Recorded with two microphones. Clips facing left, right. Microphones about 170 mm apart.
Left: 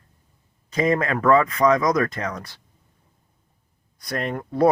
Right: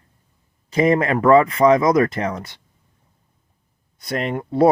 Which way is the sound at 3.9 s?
25° right (ahead or behind).